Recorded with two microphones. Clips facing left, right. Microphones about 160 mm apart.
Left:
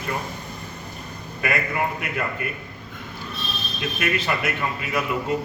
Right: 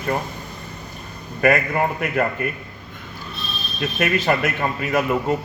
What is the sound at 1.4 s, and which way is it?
A man's voice, 45° right (ahead or behind).